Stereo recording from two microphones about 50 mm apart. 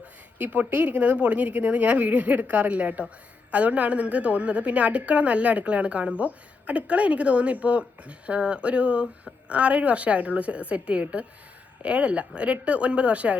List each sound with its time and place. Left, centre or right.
0.3 s a woman's voice: right